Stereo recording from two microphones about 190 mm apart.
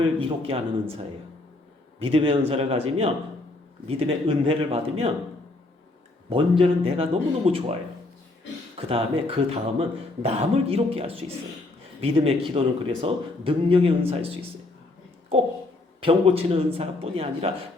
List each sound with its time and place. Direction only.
0.2 s a man's voice: 30° right (ahead or behind)
6.6 s a man's voice: 30° right (ahead or behind)
16.0 s a man's voice: 30° right (ahead or behind)